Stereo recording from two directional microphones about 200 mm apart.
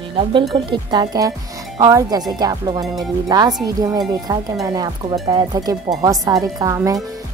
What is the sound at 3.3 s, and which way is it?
Speech, 20° right (ahead or behind).